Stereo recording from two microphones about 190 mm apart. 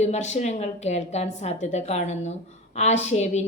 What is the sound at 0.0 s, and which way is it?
A woman's voice, 35° left (ahead or behind).